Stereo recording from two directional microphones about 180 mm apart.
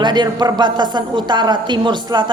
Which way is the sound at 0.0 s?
25° right (ahead or behind).